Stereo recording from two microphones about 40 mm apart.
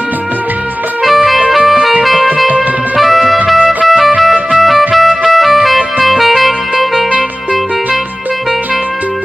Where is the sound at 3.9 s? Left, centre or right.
Centre.